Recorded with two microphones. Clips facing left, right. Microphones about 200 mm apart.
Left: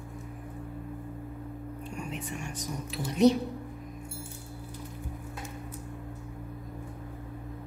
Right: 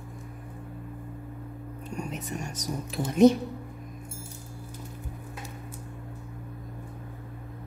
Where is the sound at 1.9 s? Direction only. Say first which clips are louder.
Right 4 dB; 40° right (ahead or behind).